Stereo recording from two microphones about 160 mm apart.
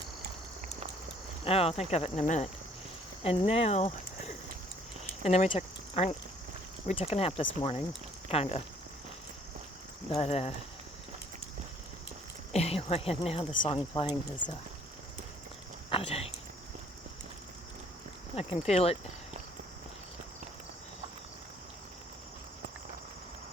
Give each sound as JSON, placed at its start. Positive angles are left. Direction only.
{"t": 1.5, "sound": "speech", "side_deg": 40}
{"t": 3.2, "sound": "speech", "side_deg": 35}
{"t": 10.1, "sound": "speech", "side_deg": 40}
{"t": 12.5, "sound": "a woman's voice", "side_deg": 40}
{"t": 15.9, "sound": "speech", "side_deg": 35}
{"t": 18.3, "sound": "speech", "side_deg": 40}